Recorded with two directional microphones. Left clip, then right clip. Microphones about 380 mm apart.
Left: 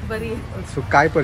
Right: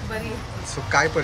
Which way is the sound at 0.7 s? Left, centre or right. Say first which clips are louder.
Left 5 dB; centre.